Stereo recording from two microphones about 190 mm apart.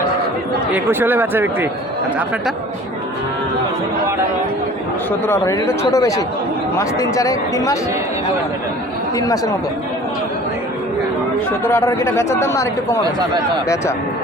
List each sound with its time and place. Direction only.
0.7 s a man's voice: 10° right (ahead or behind)
5.2 s speech: 15° left (ahead or behind)
9.1 s speech: 20° left (ahead or behind)
11.6 s speech: 15° left (ahead or behind)